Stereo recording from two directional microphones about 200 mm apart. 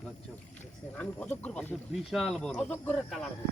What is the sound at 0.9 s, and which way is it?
Speech, 5° left (ahead or behind).